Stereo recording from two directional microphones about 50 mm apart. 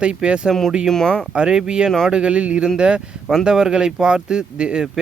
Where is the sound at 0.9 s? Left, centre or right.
Centre.